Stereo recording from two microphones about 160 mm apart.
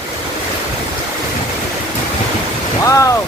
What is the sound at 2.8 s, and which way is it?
Speech, 20° left (ahead or behind).